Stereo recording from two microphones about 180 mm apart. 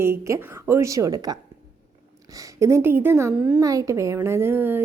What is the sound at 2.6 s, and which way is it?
A woman's voice, 15° right (ahead or behind).